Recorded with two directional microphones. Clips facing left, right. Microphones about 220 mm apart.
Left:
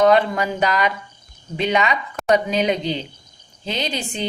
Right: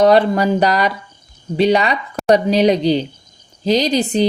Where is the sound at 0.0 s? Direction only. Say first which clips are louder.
Right 4 dB; 35° right (ahead or behind).